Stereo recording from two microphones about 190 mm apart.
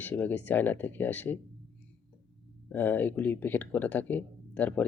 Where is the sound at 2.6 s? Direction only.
10° left (ahead or behind).